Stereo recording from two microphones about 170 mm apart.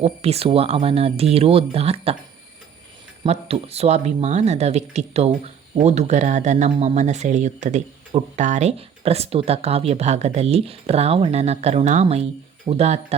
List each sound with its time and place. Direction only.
0.0 s speech: 35° right (ahead or behind)
3.2 s speech: 40° right (ahead or behind)